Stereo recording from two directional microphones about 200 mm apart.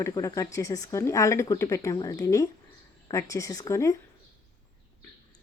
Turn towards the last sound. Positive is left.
turn(degrees=15)  # may be behind; listen again after turning